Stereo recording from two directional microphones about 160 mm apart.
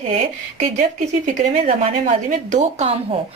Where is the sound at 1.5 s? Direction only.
40° right (ahead or behind).